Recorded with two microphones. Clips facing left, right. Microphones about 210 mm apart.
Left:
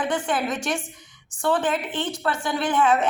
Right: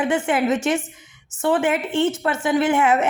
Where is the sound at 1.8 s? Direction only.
25° right (ahead or behind).